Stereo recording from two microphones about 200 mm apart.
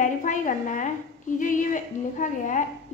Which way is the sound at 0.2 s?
40° left (ahead or behind).